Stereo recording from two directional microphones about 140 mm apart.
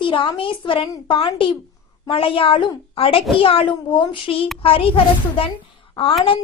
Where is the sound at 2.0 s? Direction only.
40° left (ahead or behind).